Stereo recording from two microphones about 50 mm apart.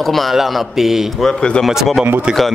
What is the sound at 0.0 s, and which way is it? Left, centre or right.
A man's voice, centre.